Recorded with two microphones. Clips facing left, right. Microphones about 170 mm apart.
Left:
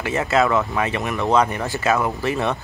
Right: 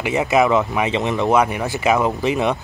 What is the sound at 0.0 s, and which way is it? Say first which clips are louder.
A man's voice: right 3 dB; 15° right (ahead or behind).